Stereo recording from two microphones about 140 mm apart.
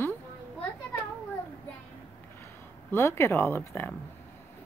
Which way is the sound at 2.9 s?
20° left (ahead or behind).